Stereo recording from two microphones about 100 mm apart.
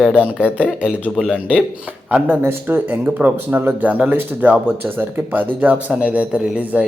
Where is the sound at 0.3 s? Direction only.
10° right (ahead or behind).